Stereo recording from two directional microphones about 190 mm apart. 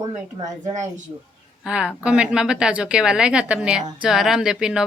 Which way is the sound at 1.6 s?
5° right (ahead or behind).